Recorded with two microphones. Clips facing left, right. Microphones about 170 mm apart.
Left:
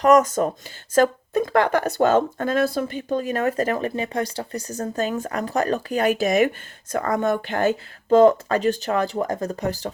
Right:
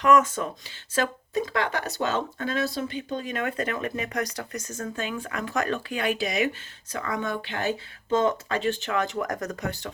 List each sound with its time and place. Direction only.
0.0 s speech: 40° left (ahead or behind)